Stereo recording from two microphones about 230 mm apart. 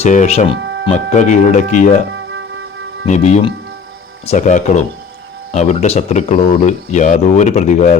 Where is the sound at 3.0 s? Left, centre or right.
Left.